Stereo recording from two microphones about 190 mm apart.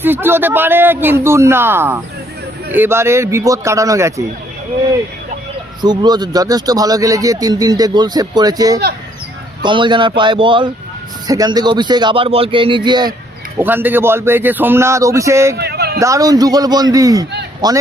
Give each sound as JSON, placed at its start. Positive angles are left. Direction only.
{"t": 0.0, "sound": "a man's voice", "side_deg": -10}
{"t": 5.8, "sound": "speech", "side_deg": -20}
{"t": 13.6, "sound": "a man's voice", "side_deg": -10}
{"t": 15.5, "sound": "a sound", "side_deg": -60}
{"t": 16.0, "sound": "speech", "side_deg": -15}